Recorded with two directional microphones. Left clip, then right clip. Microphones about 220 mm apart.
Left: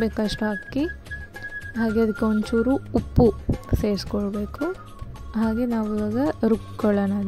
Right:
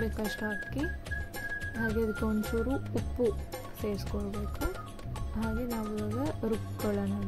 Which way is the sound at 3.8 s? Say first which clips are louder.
Left 10 dB; 35° left (ahead or behind).